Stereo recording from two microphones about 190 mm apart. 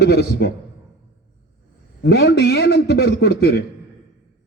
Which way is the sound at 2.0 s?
60° left (ahead or behind).